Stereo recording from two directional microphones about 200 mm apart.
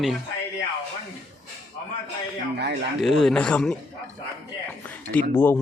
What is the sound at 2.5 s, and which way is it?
Speech, 55° right (ahead or behind).